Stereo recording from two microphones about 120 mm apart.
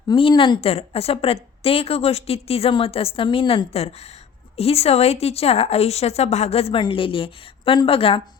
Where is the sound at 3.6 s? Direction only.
60° left (ahead or behind).